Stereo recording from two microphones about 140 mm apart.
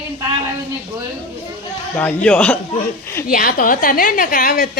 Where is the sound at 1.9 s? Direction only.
10° left (ahead or behind).